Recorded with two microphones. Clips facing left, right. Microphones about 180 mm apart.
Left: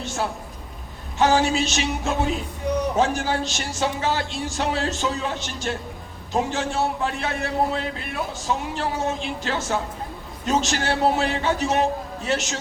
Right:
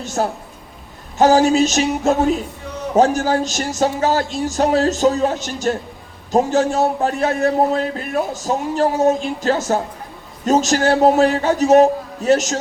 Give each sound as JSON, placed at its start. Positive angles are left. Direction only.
{"t": 0.0, "sound": "a woman's voice", "side_deg": -40}